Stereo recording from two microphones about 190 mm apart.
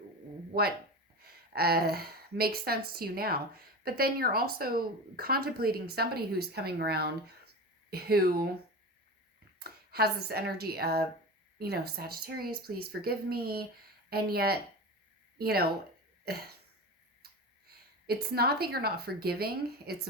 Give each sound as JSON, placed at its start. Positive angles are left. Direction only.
{"t": 0.5, "sound": "speech", "side_deg": -55}
{"t": 9.6, "sound": "speech", "side_deg": -55}
{"t": 16.2, "sound": "cough", "side_deg": -55}
{"t": 17.2, "sound": "speech", "side_deg": -55}